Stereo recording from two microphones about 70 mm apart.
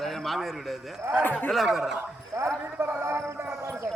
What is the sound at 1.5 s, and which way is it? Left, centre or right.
Speech, centre.